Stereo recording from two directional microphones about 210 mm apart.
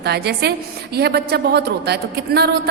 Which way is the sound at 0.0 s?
50° right (ahead or behind).